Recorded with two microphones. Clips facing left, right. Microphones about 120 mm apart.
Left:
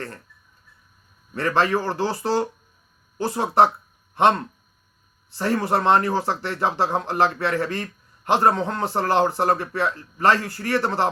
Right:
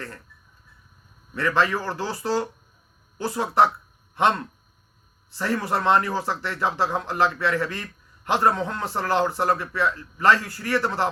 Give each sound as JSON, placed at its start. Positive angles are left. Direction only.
{"t": 1.4, "sound": "speech", "side_deg": 30}
{"t": 5.4, "sound": "speech", "side_deg": 30}
{"t": 10.3, "sound": "a man's voice", "side_deg": 55}
{"t": 10.6, "sound": "speech", "side_deg": 30}